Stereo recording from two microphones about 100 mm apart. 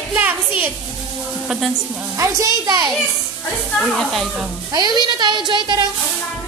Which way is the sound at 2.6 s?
45° right (ahead or behind).